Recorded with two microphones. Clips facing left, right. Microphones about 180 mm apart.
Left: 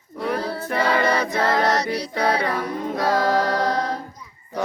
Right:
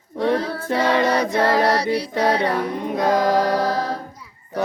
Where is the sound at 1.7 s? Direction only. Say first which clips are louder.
Right 3 dB; 30° right (ahead or behind).